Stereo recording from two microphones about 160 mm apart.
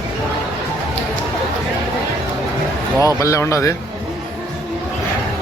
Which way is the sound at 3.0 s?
20° left (ahead or behind).